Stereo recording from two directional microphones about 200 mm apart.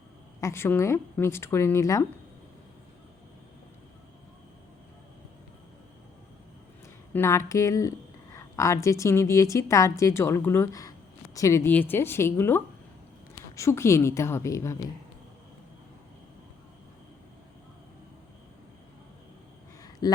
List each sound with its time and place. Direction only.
0.4 s speech: 10° left (ahead or behind)
7.1 s speech: 15° left (ahead or behind)
19.8 s a sound: 20° left (ahead or behind)